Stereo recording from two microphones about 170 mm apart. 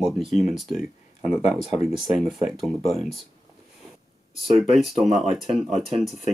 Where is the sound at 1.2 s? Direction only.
40° left (ahead or behind).